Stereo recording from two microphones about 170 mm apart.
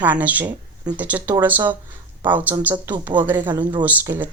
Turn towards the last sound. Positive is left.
turn(degrees=-10)  # may be behind; listen again after turning